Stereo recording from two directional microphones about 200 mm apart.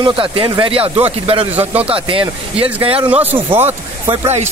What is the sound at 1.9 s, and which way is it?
Speech, 25° right (ahead or behind).